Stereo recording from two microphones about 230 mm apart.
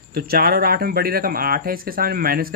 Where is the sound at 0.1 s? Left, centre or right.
Right.